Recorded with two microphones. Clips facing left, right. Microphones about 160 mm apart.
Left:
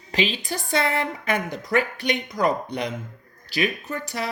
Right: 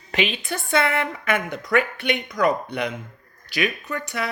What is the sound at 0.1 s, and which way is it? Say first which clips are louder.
A woman's voice: even; 35° left (ahead or behind).